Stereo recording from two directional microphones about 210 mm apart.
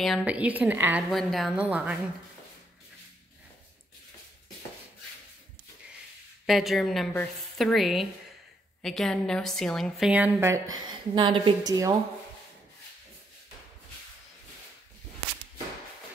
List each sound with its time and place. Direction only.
0.0 s a woman's voice: centre (ahead or behind)
6.4 s a woman's voice: centre (ahead or behind)
10.8 s a woman's voice: 20° right (ahead or behind)